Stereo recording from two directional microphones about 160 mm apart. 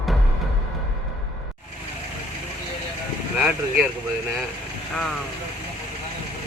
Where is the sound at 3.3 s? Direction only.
5° right (ahead or behind).